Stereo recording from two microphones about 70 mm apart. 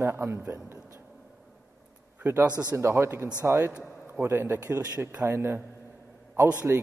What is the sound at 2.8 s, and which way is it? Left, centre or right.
Speech, right.